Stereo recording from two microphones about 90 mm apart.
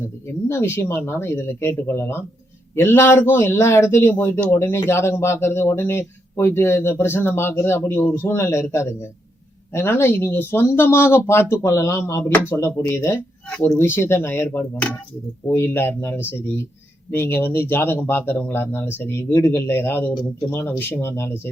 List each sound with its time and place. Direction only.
0.4 s speech: 30° left (ahead or behind)
13.5 s speech: 10° left (ahead or behind)
13.7 s speech: 25° left (ahead or behind)